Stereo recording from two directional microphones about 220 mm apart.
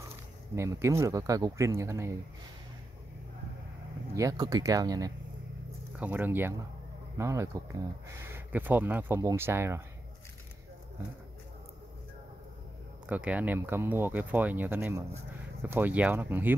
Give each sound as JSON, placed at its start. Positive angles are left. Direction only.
{"t": 0.6, "sound": "speech", "side_deg": -15}
{"t": 4.1, "sound": "speech", "side_deg": -15}
{"t": 13.1, "sound": "speech", "side_deg": -5}